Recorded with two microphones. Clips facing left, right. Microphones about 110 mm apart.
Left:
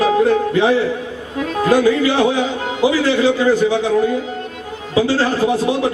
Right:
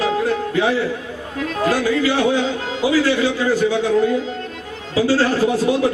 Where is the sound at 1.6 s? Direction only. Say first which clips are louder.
Left 4 dB; 20° left (ahead or behind).